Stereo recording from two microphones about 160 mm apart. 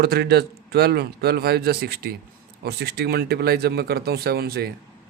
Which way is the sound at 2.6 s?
85° right.